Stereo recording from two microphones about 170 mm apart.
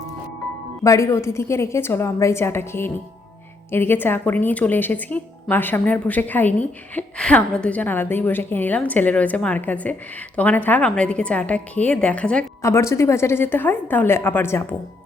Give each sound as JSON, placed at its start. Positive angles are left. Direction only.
{"t": 0.9, "sound": "a woman's voice", "side_deg": 15}